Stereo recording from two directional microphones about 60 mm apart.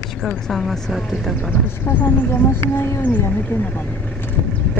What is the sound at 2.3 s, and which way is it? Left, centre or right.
Speech, left.